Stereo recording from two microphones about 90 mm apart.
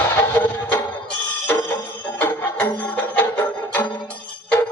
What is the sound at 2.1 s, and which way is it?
Music, 15° left (ahead or behind).